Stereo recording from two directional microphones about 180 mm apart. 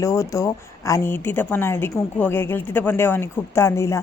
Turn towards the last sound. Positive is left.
turn(degrees=15)  # may be behind; listen again after turning